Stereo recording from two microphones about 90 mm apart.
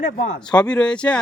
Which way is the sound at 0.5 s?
10° left (ahead or behind).